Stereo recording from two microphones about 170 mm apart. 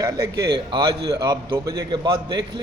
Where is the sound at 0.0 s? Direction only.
20° right (ahead or behind).